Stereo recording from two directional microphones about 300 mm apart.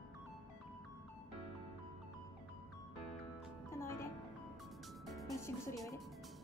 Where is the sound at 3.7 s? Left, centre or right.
Centre.